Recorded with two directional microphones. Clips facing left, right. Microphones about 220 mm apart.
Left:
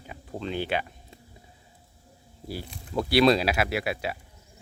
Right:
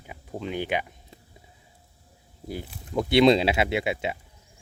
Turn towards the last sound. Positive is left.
turn(degrees=-25)  # may be behind; listen again after turning